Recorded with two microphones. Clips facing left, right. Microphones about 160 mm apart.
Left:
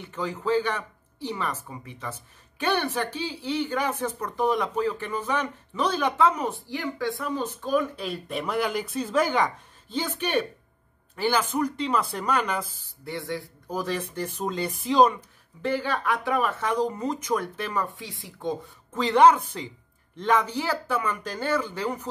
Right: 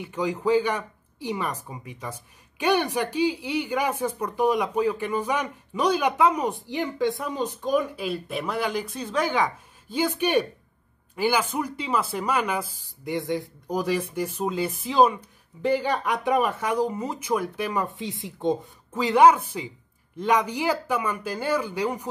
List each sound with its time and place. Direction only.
0.0 s speech: 10° right (ahead or behind)
15.6 s speech: 15° right (ahead or behind)
18.9 s speech: 10° right (ahead or behind)